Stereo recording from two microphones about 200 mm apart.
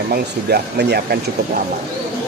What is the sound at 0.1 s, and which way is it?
Speech, 55° right (ahead or behind).